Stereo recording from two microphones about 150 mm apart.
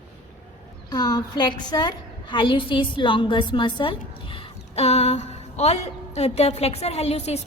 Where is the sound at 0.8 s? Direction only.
25° left (ahead or behind).